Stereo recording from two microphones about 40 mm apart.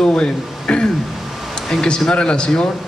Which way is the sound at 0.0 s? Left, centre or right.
Left.